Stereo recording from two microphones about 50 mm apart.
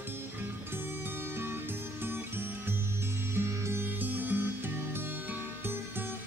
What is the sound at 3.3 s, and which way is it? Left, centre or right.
Music, right.